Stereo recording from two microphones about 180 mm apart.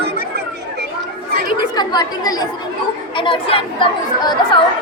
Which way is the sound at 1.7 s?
20° left (ahead or behind).